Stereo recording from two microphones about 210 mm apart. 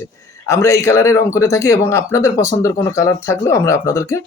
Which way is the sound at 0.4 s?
15° left (ahead or behind).